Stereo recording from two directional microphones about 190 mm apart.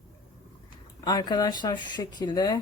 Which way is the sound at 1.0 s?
20° left (ahead or behind).